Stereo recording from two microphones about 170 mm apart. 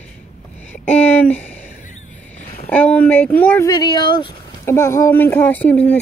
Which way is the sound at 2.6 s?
5° left (ahead or behind).